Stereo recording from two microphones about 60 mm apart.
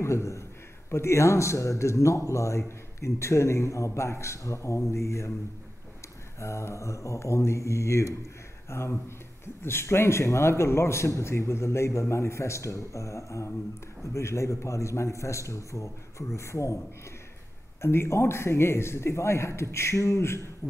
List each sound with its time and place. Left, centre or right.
0.0 s a man's voice: left
6.4 s a man's voice: left
17.8 s a man's voice: left